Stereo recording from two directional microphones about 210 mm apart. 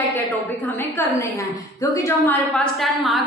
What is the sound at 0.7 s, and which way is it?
A woman's voice, 10° left (ahead or behind).